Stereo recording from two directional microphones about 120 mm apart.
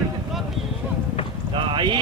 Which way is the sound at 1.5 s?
45° right (ahead or behind).